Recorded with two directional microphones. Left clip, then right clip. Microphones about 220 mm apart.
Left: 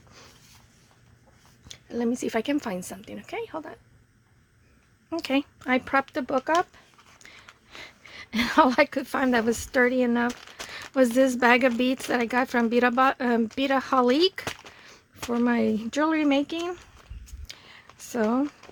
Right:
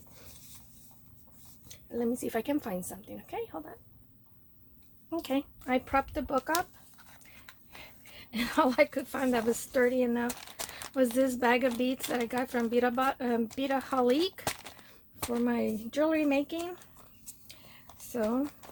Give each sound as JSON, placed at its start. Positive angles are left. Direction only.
{"t": 1.6, "sound": "a woman's voice", "side_deg": 45}
{"t": 5.0, "sound": "speech", "side_deg": 30}
{"t": 7.8, "sound": "a woman's voice", "side_deg": 50}
{"t": 17.5, "sound": "a sound", "side_deg": 45}